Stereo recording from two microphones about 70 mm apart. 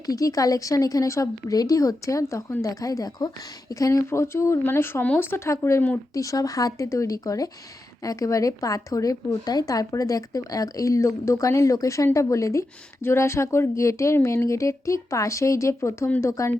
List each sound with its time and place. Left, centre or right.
0.0 s speech: left
4.0 s speech: left
6.1 s speech: left
13.0 s speech: left